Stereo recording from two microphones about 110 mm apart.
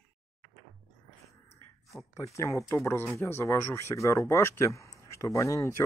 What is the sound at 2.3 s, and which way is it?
Speech, 25° left (ahead or behind).